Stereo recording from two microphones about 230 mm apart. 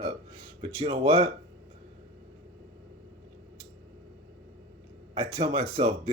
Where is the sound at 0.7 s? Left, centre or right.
Right.